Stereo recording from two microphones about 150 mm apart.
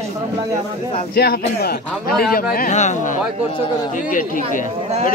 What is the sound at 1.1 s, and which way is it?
Speech, 90° left.